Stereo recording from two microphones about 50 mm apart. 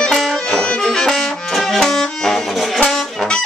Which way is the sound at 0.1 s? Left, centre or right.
Centre.